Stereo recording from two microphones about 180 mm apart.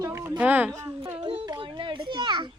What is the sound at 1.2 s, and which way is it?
Speech, 30° right (ahead or behind).